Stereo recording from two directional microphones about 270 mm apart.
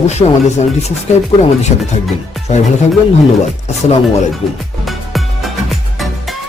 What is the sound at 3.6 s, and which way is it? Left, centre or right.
Speech, left.